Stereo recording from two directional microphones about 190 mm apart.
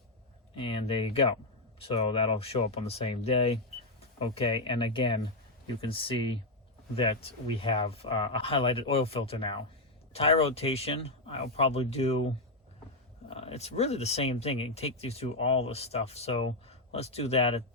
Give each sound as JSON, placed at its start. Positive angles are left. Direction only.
{"t": 0.5, "sound": "speech", "side_deg": 25}
{"t": 13.3, "sound": "speech", "side_deg": 35}